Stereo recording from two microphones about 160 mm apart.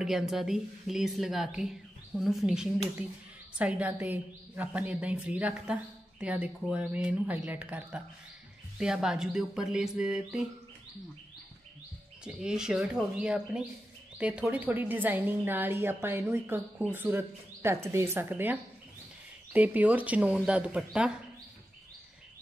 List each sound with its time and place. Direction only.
0.0 s a woman's voice: centre (ahead or behind)
12.3 s a woman's voice: 5° right (ahead or behind)
19.5 s a woman's voice: 10° right (ahead or behind)